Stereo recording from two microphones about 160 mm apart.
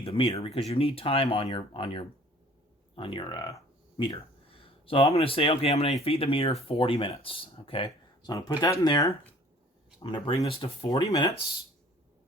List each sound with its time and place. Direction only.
0.0 s speech: 35° left (ahead or behind)
8.3 s speech: 25° left (ahead or behind)